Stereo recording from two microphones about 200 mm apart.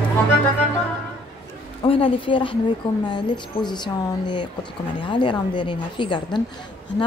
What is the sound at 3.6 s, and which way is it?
Speech, 20° left (ahead or behind).